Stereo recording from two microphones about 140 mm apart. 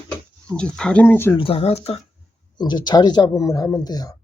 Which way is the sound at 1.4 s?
40° left (ahead or behind).